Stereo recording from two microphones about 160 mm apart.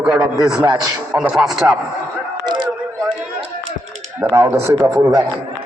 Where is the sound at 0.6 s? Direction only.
20° right (ahead or behind).